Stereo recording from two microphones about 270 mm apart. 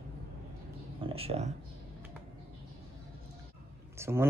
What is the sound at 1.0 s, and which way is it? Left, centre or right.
Speech, right.